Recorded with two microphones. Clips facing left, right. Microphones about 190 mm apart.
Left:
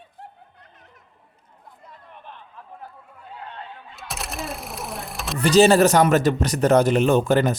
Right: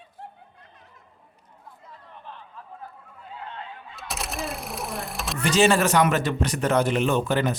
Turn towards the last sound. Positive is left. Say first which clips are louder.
# left 5 dB
turn(degrees=45)  # may be behind; listen again after turning